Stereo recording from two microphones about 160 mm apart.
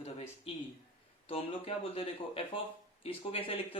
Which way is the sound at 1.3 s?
35° left (ahead or behind).